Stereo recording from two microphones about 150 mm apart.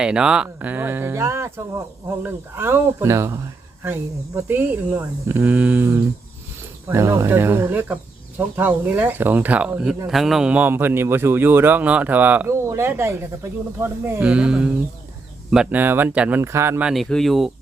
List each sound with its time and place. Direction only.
0.0 s a man's voice: 5° right (ahead or behind)
16.9 s speech: centre (ahead or behind)